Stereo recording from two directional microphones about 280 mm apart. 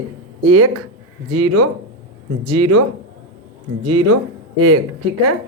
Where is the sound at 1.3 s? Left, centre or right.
Right.